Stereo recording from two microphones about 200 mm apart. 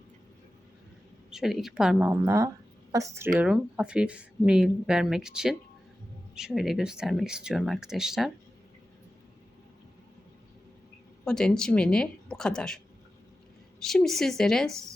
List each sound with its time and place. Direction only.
1.3 s speech: centre (ahead or behind)
3.3 s speech: 5° right (ahead or behind)
11.3 s speech: 5° left (ahead or behind)